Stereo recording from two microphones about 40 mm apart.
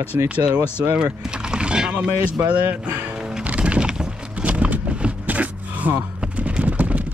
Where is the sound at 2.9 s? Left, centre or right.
Right.